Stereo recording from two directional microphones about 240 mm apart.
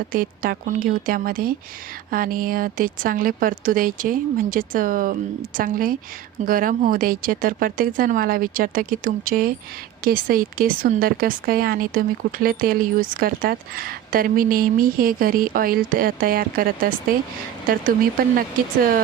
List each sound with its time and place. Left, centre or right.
0.1 s speech: right